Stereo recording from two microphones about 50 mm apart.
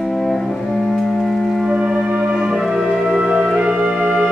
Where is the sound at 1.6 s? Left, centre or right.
Centre.